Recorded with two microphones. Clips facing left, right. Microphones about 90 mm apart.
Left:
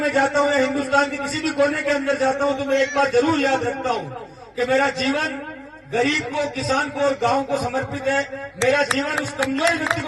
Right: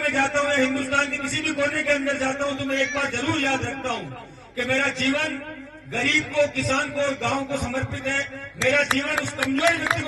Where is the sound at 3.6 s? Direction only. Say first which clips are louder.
Left 6 dB; 60° left (ahead or behind).